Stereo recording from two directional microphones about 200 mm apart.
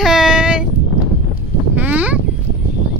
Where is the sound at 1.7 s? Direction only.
5° right (ahead or behind).